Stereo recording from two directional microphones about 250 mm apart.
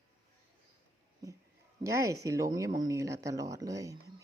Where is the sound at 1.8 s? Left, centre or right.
Centre.